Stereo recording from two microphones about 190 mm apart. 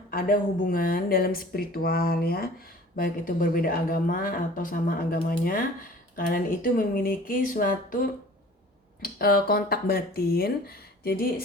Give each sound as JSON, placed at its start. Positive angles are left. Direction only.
{"t": 0.1, "sound": "speech", "side_deg": 50}